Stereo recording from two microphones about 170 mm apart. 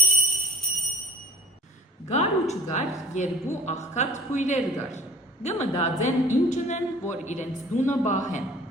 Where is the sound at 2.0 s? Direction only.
40° left (ahead or behind).